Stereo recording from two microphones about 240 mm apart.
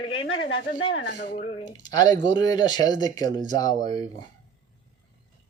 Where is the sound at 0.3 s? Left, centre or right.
Left.